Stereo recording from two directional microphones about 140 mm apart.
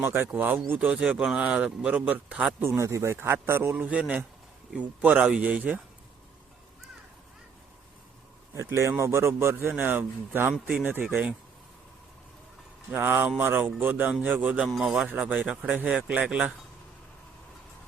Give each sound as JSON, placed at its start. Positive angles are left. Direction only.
{"t": 0.0, "sound": "a man's voice", "side_deg": -15}
{"t": 2.6, "sound": "a man's voice", "side_deg": -20}
{"t": 8.5, "sound": "a man's voice", "side_deg": -20}
{"t": 12.9, "sound": "a man's voice", "side_deg": -15}